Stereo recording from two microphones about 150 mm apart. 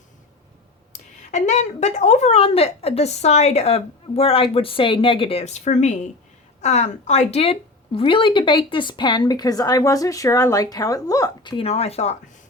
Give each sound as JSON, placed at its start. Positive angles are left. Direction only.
{"t": 0.9, "sound": "a woman's voice", "side_deg": 50}
{"t": 11.5, "sound": "a woman's voice", "side_deg": 40}